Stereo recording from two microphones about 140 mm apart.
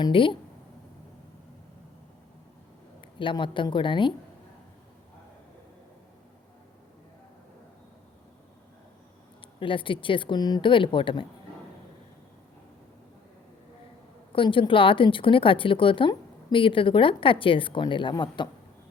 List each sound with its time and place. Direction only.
0.0 s a woman's voice: 35° left (ahead or behind)
3.2 s a woman's voice: 35° left (ahead or behind)
9.6 s a woman's voice: 40° left (ahead or behind)
14.3 s a woman's voice: 35° left (ahead or behind)